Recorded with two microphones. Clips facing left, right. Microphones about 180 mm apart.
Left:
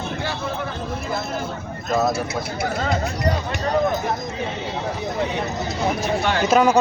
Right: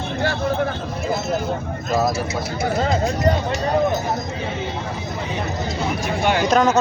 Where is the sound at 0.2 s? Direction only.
50° right (ahead or behind).